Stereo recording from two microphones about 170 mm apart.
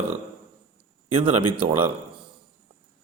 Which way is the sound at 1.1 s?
30° right (ahead or behind).